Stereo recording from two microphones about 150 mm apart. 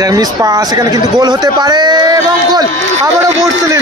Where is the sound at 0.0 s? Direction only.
25° right (ahead or behind).